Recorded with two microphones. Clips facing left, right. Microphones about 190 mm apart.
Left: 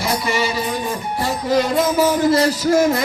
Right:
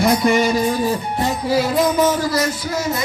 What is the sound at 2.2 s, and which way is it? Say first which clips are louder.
Speech: left 5 dB; 30° left (ahead or behind).